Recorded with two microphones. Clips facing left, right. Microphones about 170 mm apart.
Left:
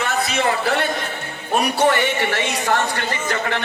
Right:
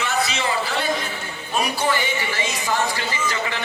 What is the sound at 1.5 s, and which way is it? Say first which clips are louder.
A woman's voice: left 5 dB; 65° left (ahead or behind).